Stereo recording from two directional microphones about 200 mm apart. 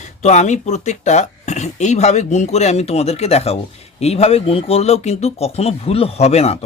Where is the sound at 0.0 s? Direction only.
35° left (ahead or behind).